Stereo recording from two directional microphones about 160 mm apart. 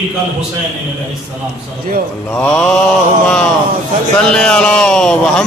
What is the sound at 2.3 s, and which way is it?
Mantra, 10° left (ahead or behind).